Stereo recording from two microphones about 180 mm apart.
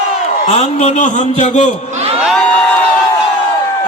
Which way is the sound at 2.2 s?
Centre (ahead or behind).